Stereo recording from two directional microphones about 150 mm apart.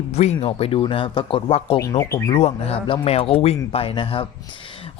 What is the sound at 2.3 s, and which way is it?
Speech, 45° left (ahead or behind).